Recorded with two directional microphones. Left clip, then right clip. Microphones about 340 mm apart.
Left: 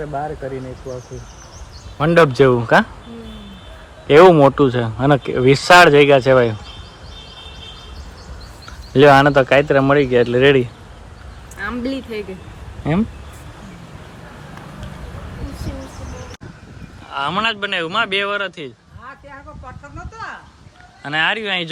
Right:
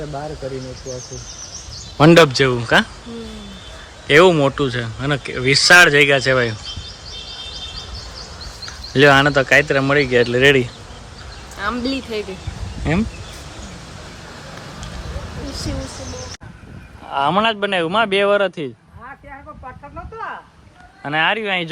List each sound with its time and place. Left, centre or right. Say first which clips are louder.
2.0 s speech: right 7 dB; right
2.3 s speech: left 3 dB; centre
4.0 s speech: left 3 dB; centre
8.6 s speech: left 2 dB; centre
17.1 s speech: right 3 dB; centre
21.0 s speech: even; centre